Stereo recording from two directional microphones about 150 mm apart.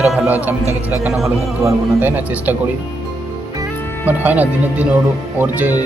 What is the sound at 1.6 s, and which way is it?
Speech, 10° right (ahead or behind).